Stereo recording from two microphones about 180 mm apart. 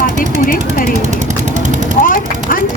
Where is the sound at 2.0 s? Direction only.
50° left (ahead or behind).